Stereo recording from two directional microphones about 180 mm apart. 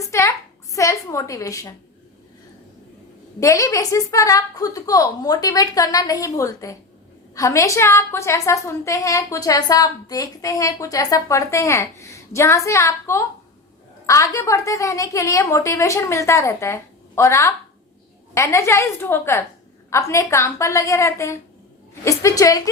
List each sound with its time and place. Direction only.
0.0 s a woman's voice: 15° left (ahead or behind)
3.4 s a woman's voice: 15° left (ahead or behind)